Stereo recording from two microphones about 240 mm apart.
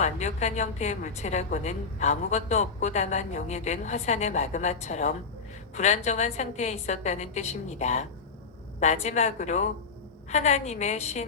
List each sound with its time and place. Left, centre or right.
0.0 s a woman's voice: left